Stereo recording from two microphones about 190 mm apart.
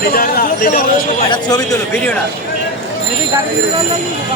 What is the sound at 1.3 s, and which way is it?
Speech, 20° left (ahead or behind).